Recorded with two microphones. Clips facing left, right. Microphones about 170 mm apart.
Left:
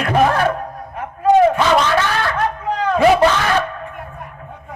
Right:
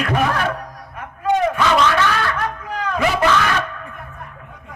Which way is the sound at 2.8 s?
30° left (ahead or behind).